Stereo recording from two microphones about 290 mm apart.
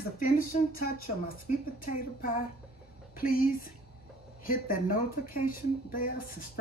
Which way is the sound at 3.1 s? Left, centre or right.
Left.